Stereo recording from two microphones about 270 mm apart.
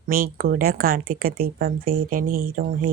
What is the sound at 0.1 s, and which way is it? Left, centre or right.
Speech, right.